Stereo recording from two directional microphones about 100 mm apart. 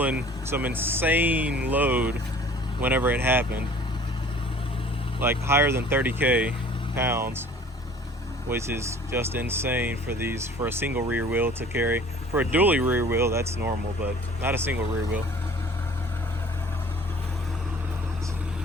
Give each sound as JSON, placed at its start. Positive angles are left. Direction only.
{"t": 0.0, "sound": "speech", "side_deg": -15}
{"t": 5.2, "sound": "speech", "side_deg": -25}
{"t": 6.9, "sound": "speech", "side_deg": -25}
{"t": 8.4, "sound": "speech", "side_deg": -25}